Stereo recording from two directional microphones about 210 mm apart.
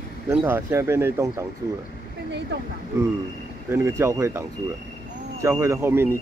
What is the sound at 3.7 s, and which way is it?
Speech, 10° right (ahead or behind).